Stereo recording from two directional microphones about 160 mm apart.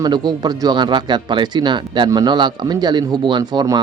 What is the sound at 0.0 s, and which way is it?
Speech, 25° right (ahead or behind).